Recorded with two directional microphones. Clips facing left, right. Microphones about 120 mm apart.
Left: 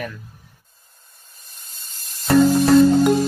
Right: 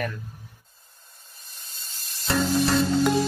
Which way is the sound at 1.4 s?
45° left (ahead or behind).